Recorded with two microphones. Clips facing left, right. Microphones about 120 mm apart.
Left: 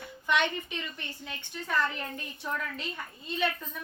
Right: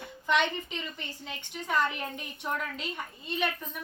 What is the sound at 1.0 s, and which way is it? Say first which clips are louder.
A woman's voice: right 1 dB; 20° right (ahead or behind).